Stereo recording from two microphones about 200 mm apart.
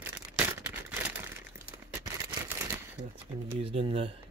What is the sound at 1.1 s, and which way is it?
Crumpling, 10° right (ahead or behind).